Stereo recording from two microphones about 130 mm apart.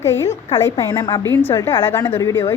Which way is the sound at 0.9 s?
30° left (ahead or behind).